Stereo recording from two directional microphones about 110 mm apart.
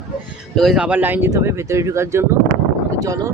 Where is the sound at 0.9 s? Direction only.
15° right (ahead or behind); by 3.3 s 30° right (ahead or behind).